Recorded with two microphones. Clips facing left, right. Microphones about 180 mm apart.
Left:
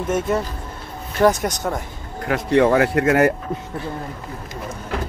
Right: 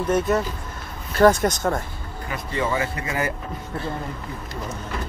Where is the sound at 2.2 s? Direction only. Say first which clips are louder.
Left 10 dB; 75° left (ahead or behind).